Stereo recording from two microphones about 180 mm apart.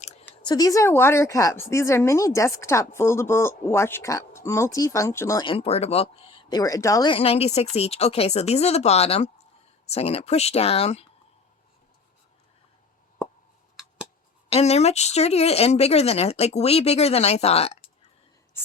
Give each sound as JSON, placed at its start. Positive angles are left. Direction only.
{"t": 0.4, "sound": "a woman's voice", "side_deg": 20}
{"t": 14.5, "sound": "speech", "side_deg": 35}